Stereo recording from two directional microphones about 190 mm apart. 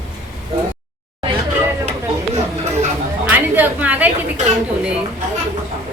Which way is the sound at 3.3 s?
10° right (ahead or behind).